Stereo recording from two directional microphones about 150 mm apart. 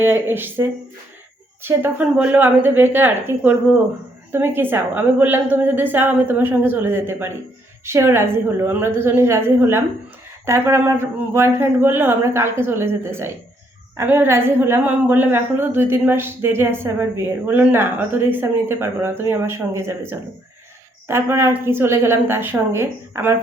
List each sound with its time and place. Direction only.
0.0 s a woman's voice: 15° right (ahead or behind)
1.6 s a woman's voice: 15° right (ahead or behind)